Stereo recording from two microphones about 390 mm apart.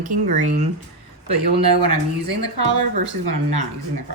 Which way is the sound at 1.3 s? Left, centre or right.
Right.